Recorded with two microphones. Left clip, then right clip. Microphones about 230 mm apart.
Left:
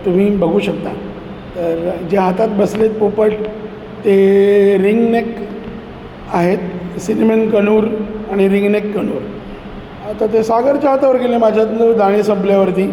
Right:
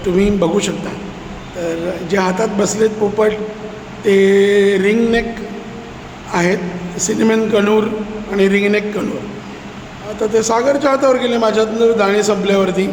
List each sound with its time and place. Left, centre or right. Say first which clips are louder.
0.2 s a man's voice: right 1 dB; centre
6.3 s a man's voice: left 1 dB; centre
10.2 s a man's voice: left 1 dB; centre